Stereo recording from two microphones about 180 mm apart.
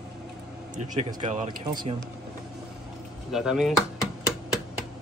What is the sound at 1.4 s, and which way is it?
Speech, 25° right (ahead or behind).